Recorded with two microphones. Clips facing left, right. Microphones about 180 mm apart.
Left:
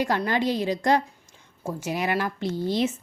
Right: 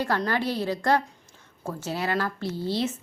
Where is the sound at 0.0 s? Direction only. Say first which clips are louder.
Left 2 dB; 15° left (ahead or behind).